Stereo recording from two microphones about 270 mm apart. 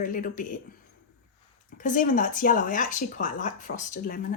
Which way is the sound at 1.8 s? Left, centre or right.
Left.